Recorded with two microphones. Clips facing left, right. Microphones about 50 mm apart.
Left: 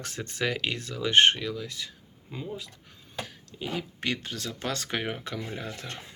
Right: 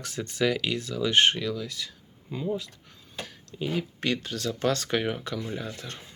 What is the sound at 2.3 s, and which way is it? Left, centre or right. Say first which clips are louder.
Speech: right 4 dB; centre.